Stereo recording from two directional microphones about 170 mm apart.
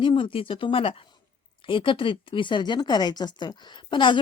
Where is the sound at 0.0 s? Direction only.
30° left (ahead or behind).